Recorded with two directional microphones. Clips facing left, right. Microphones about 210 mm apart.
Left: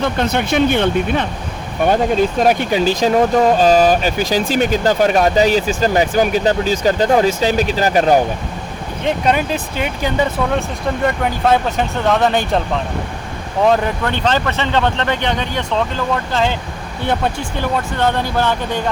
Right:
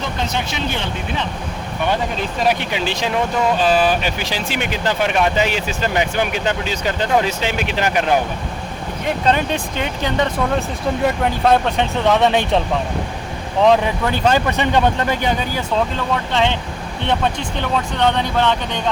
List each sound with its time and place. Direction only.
0.0 s speech: 60° left (ahead or behind)
2.4 s speech: 45° left (ahead or behind)
9.2 s speech: 10° left (ahead or behind)